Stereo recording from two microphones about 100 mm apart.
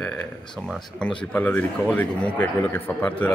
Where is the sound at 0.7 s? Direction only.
10° left (ahead or behind).